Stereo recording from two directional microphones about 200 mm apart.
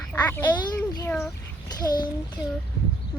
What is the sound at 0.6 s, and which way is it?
A child's voice, 20° left (ahead or behind).